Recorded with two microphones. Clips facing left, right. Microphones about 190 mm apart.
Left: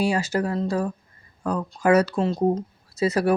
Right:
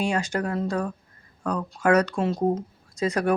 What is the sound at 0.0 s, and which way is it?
Speech, 5° left (ahead or behind).